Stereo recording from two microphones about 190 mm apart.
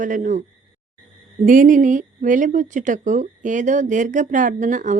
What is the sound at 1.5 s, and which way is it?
A woman's voice, 45° right (ahead or behind).